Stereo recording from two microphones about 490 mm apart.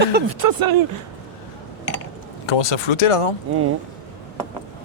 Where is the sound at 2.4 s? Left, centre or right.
Left.